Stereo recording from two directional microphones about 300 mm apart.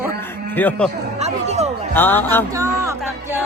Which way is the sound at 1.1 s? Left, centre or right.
Right.